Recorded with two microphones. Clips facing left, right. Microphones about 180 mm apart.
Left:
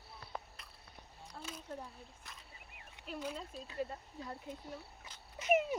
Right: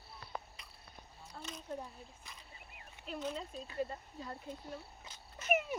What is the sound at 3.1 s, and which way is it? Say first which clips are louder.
Speech: right 2 dB; 10° left (ahead or behind).